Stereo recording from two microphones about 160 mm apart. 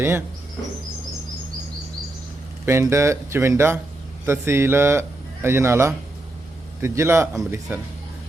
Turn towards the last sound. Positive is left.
turn(degrees=-10)  # may be behind; listen again after turning